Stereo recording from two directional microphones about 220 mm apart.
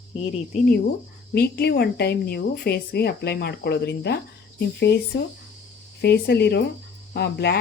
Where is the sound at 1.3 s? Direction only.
45° left (ahead or behind).